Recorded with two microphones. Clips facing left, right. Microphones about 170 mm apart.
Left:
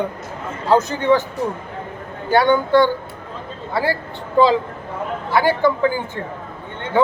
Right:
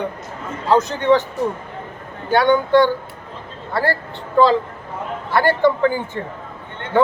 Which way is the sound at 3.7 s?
5° left (ahead or behind).